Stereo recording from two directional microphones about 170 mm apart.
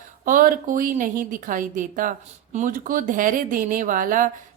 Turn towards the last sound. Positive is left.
turn(degrees=-50)  # may be behind; listen again after turning